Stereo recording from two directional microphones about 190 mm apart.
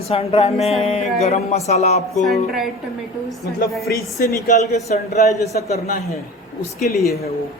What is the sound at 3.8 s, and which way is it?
Speech, 55° left (ahead or behind).